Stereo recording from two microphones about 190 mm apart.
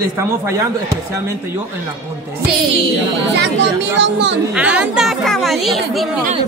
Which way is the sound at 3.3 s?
65° right (ahead or behind).